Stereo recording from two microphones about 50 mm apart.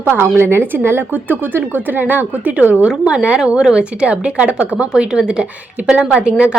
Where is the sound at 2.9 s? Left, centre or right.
Centre.